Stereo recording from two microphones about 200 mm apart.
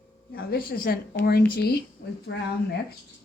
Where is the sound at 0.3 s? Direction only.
50° left (ahead or behind).